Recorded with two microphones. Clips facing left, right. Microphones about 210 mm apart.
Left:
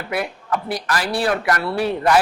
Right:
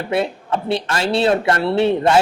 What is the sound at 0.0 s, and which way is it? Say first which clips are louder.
A man's voice: right 5 dB; 25° right (ahead or behind).